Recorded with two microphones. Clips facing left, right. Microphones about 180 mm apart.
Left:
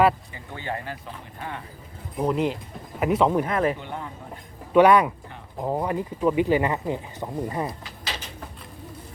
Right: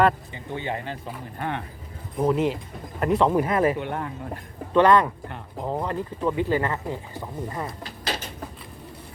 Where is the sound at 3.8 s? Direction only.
65° right (ahead or behind).